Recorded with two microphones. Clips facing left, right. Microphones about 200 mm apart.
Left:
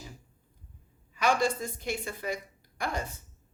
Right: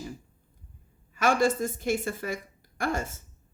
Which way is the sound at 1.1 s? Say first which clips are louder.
Right 3 dB; 45° right (ahead or behind).